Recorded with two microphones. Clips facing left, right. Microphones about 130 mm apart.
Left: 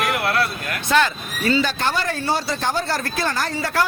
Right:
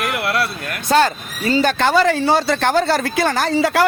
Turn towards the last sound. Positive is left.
turn(degrees=-80)